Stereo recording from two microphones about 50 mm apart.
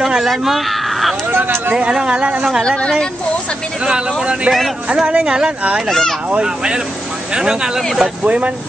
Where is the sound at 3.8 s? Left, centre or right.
Centre.